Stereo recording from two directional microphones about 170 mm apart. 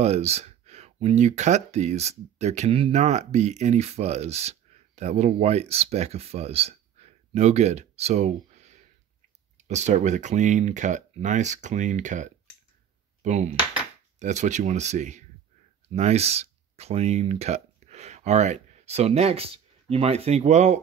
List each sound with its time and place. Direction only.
0.0 s speech: 40° right (ahead or behind)